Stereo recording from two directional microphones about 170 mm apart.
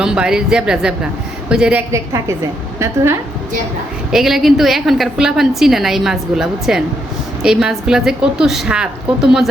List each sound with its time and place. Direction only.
0.0 s a woman's voice: 5° right (ahead or behind)
1.9 s a woman's voice: 15° right (ahead or behind)
4.1 s a woman's voice: centre (ahead or behind)